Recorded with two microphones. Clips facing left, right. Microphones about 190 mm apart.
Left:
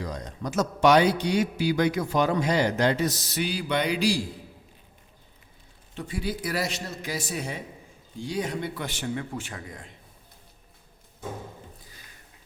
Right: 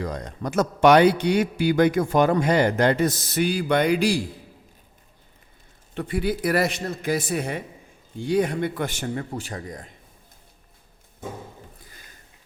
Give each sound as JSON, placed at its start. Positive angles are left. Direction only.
{"t": 0.0, "sound": "a man's voice", "side_deg": -55}
{"t": 5.9, "sound": "a man's voice", "side_deg": -60}